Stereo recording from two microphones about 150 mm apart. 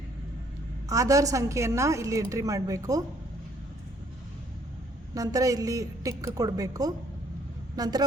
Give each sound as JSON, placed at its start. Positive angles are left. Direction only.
{"t": 0.9, "sound": "a woman's voice", "side_deg": -20}
{"t": 5.1, "sound": "a woman's voice", "side_deg": -20}